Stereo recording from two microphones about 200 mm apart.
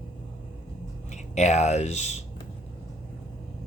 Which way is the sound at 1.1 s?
35° left (ahead or behind).